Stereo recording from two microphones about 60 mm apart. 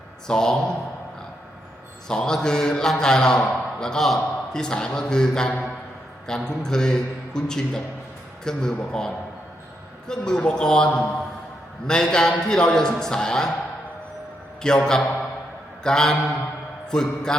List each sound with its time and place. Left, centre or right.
0.3 s a man's voice: centre
2.0 s a man's voice: centre
14.6 s a man's voice: centre